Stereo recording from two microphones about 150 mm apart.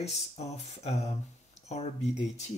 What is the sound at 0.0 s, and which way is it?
Speech, 45° left (ahead or behind).